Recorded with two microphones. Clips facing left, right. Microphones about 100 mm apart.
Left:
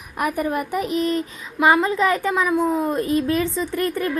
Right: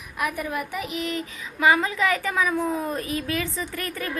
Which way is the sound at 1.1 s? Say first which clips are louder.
Left 6 dB; 20° left (ahead or behind).